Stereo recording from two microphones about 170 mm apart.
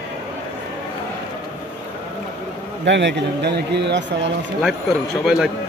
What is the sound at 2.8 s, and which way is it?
A man's voice, 90° right.